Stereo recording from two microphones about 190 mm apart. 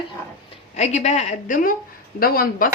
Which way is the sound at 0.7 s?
35° left (ahead or behind).